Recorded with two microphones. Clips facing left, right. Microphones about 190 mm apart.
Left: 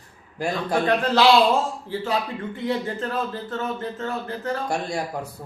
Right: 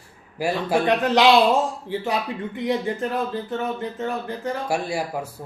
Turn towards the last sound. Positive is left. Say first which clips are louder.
# right 1 dB
turn(degrees=-5)  # may be behind; listen again after turning